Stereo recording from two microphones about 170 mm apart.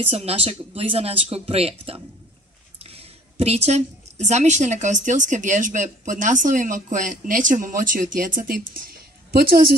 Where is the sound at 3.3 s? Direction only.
40° right (ahead or behind).